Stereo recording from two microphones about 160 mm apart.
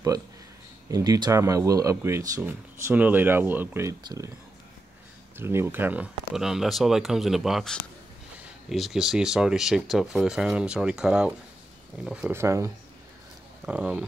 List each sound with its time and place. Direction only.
0.8 s speech: 20° right (ahead or behind)
5.4 s speech: 15° right (ahead or behind)